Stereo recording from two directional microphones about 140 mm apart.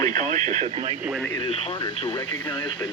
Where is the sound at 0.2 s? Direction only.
60° right (ahead or behind).